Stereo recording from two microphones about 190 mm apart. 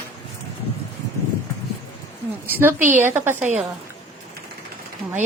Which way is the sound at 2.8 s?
40° right (ahead or behind).